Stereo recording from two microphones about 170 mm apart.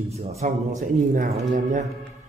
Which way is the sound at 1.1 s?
60° right (ahead or behind).